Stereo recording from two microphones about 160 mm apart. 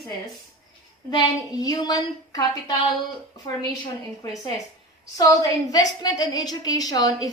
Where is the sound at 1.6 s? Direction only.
25° left (ahead or behind).